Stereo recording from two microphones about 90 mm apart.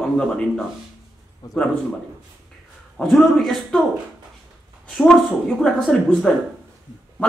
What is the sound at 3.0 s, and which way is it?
Speech, 5° left (ahead or behind).